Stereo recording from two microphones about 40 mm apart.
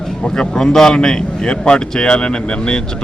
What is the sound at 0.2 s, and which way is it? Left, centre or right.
A man's voice, centre.